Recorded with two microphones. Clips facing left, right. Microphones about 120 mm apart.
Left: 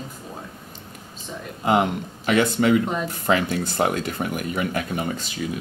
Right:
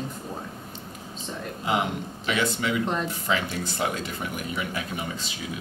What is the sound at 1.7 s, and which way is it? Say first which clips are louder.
Speech: left 6 dB; 50° left (ahead or behind).